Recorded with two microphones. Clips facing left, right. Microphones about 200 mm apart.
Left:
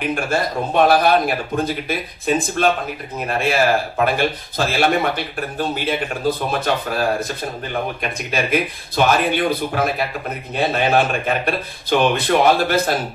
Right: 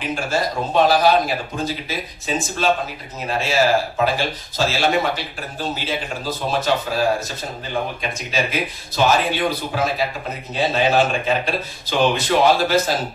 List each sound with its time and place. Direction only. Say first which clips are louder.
0.0 s speech: left 2 dB; 55° left (ahead or behind)